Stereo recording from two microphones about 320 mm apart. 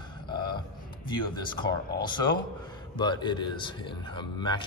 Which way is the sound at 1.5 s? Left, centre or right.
Centre.